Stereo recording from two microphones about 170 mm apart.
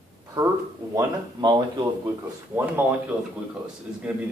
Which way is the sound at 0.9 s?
20° right (ahead or behind).